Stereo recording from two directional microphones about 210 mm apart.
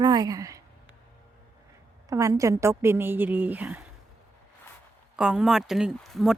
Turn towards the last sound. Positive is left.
turn(degrees=0)  # may be behind; listen again after turning